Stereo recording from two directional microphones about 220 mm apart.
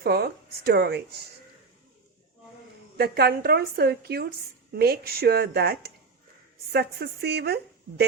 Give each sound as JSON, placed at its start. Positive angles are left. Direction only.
{"t": 0.0, "sound": "a woman's voice", "side_deg": -45}
{"t": 3.0, "sound": "a woman's voice", "side_deg": -45}